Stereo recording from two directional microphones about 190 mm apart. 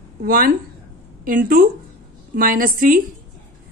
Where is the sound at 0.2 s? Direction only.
50° right (ahead or behind).